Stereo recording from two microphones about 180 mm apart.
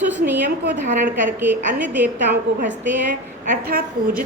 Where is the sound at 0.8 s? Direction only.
45° right (ahead or behind).